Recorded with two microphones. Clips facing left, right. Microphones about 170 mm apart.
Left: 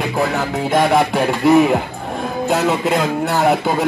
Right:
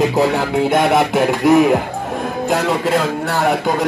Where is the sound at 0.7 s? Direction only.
5° right (ahead or behind).